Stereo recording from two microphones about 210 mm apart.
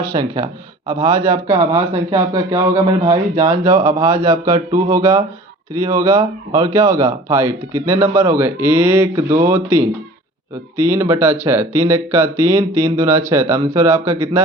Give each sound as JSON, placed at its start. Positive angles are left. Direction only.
{"t": 0.0, "sound": "a man's voice", "side_deg": -15}